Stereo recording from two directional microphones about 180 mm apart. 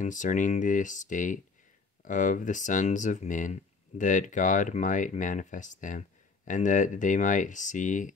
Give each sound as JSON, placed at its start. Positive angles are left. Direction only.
{"t": 0.0, "sound": "speech", "side_deg": 45}